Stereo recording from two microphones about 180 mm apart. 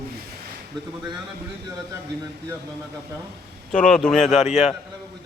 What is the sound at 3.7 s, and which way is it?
Speech, 5° left (ahead or behind).